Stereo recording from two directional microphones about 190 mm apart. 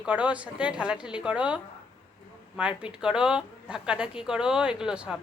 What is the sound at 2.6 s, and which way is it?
A woman's voice, 5° right (ahead or behind).